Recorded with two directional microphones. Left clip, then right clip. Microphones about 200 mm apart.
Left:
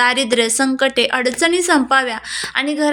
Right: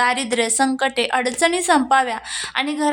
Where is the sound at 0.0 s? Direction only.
5° left (ahead or behind).